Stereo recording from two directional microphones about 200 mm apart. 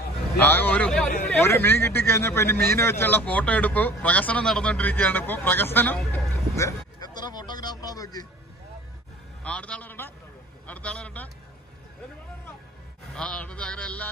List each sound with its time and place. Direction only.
0.4 s a man's voice: 10° left (ahead or behind)
7.0 s a sound: 20° left (ahead or behind)
9.4 s a man's voice: 5° left (ahead or behind)
13.1 s a man's voice: 5° left (ahead or behind)